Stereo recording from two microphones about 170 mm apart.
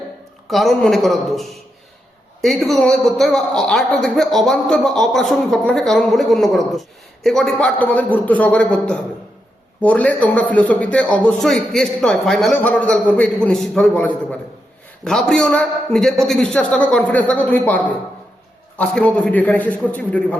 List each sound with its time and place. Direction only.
0.5 s a man's voice: centre (ahead or behind)